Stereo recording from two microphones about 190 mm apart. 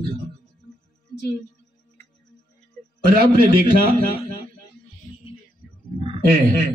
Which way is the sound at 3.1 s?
50° right (ahead or behind).